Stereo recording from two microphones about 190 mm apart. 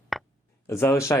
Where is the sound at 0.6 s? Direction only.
15° left (ahead or behind).